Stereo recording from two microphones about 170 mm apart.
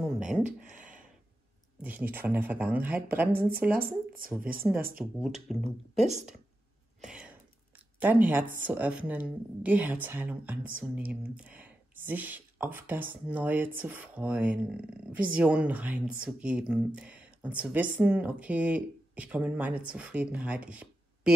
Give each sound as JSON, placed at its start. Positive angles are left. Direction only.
{"t": 0.0, "sound": "a sound", "side_deg": -5}
{"t": 1.8, "sound": "speech", "side_deg": -10}
{"t": 3.8, "sound": "speech", "side_deg": -60}
{"t": 5.2, "sound": "speech", "side_deg": 0}
{"t": 7.0, "sound": "a sound", "side_deg": -5}
{"t": 8.0, "sound": "speech", "side_deg": -10}